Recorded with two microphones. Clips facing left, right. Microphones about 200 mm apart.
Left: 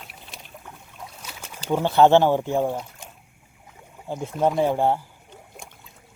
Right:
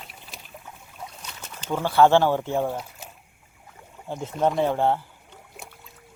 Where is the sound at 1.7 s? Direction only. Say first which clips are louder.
Left 2 dB; 20° left (ahead or behind).